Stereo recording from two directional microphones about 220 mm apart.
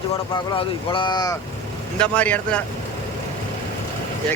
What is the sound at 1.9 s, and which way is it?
Speech, 5° left (ahead or behind).